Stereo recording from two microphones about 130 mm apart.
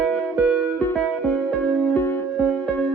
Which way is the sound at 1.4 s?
10° left (ahead or behind).